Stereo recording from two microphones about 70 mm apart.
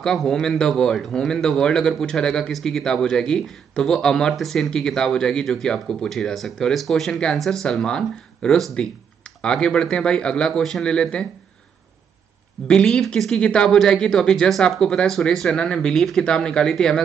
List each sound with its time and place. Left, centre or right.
0.0 s a man's voice: centre
12.6 s a man's voice: centre